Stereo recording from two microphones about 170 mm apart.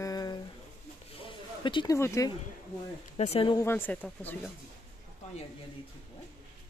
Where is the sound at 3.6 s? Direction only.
15° left (ahead or behind).